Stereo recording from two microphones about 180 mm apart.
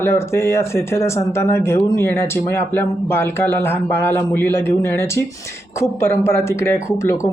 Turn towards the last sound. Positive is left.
turn(degrees=15)  # may be behind; listen again after turning